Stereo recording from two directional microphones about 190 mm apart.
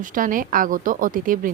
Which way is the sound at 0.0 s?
45° right (ahead or behind).